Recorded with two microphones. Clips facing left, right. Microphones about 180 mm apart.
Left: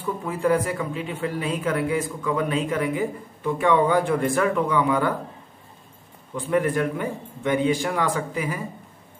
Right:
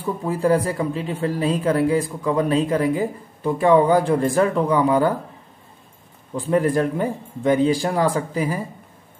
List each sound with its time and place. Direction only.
0.0 s speech: 35° right (ahead or behind)
6.3 s speech: 35° right (ahead or behind)